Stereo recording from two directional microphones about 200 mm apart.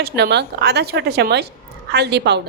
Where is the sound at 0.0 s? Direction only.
55° right (ahead or behind).